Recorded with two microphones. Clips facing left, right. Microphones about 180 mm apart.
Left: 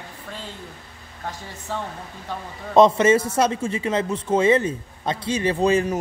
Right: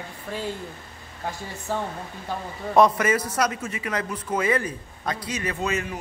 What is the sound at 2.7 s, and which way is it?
A man's voice, 25° left (ahead or behind).